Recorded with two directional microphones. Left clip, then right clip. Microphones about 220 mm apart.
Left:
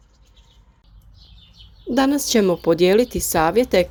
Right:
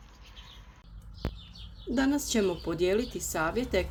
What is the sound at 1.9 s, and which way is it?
A woman's voice, 35° left (ahead or behind).